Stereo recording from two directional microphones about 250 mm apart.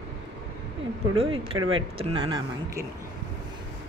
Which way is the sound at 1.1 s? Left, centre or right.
Right.